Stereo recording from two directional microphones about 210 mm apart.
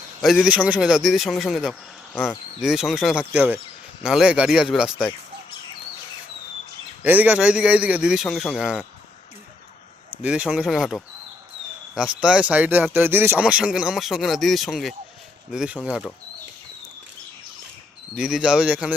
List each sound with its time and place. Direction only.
0.2 s speech: centre (ahead or behind)
7.0 s speech: 10° right (ahead or behind)
10.2 s speech: 5° right (ahead or behind)
18.1 s speech: centre (ahead or behind)